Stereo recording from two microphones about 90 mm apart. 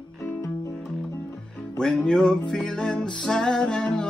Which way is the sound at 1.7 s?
10° left (ahead or behind).